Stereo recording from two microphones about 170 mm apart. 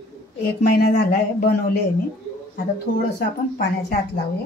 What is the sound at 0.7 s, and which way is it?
Speech, 65° left (ahead or behind).